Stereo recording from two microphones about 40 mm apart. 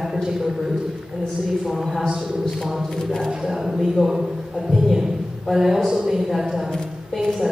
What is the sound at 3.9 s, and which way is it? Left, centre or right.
Speech, centre.